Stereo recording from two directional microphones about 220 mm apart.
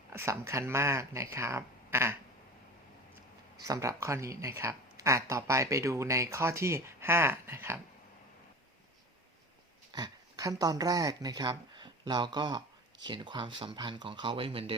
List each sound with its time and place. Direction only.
0.1 s speech: 10° right (ahead or behind)
3.7 s speech: 15° right (ahead or behind)
9.9 s speech: 15° right (ahead or behind)